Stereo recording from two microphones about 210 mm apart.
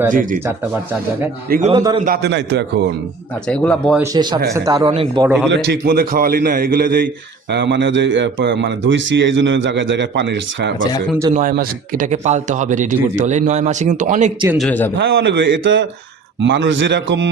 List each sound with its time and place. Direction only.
0.1 s a man's voice: 40° right (ahead or behind)
1.5 s a man's voice: 45° right (ahead or behind)
1.7 s a man's voice: 20° right (ahead or behind)
2.0 s a man's voice: 55° right (ahead or behind)
3.4 s speech: 5° left (ahead or behind)
3.9 s a man's voice: 15° right (ahead or behind)
5.5 s a man's voice: 50° right (ahead or behind)
11.3 s a man's voice: 45° right (ahead or behind)
14.6 s a man's voice: 10° left (ahead or behind)
14.9 s a man's voice: 60° right (ahead or behind)